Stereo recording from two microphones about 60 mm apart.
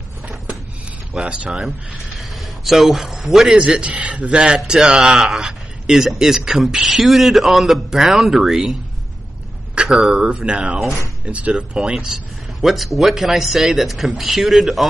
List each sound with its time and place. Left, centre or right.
1.1 s speech: right
2.1 s a man's voice: centre
3.9 s speech: right
4.4 s a man's voice: centre
9.8 s speech: centre
12.6 s a man's voice: centre